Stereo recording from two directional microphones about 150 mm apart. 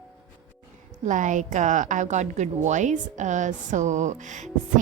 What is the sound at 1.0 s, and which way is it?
A woman's voice, 55° right (ahead or behind).